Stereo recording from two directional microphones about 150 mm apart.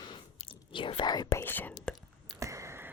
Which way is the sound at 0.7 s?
35° left (ahead or behind).